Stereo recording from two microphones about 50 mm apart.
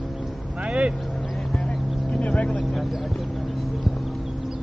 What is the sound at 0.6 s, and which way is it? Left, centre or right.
Speech, right.